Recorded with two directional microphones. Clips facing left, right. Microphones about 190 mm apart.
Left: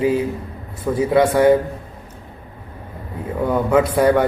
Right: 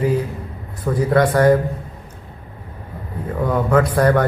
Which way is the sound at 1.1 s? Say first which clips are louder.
Left 1 dB; 5° left (ahead or behind).